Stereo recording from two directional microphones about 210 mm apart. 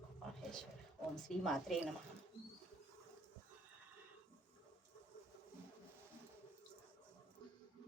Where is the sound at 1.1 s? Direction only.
Centre (ahead or behind).